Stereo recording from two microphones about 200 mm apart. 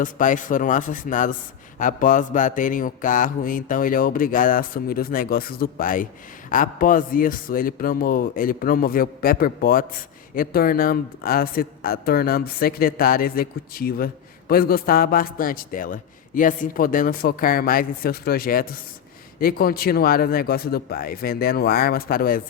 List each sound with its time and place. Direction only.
0.0 s speech: 40° left (ahead or behind)